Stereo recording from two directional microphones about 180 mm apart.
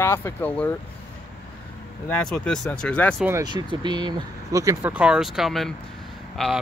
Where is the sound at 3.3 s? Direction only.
20° right (ahead or behind).